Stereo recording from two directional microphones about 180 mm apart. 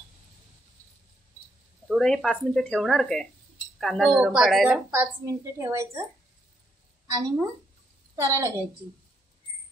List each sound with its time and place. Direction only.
1.9 s a woman's voice: centre (ahead or behind); by 6.0 s 15° right (ahead or behind)
7.1 s a woman's voice: 20° right (ahead or behind)